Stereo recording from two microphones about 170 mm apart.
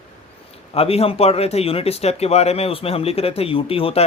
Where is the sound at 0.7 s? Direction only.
35° left (ahead or behind).